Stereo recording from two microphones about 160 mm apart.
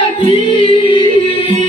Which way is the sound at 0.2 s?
35° left (ahead or behind).